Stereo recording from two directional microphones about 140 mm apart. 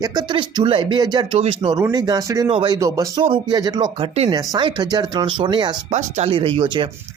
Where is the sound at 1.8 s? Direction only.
25° right (ahead or behind).